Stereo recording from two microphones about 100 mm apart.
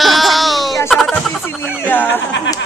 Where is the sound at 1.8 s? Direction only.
20° left (ahead or behind).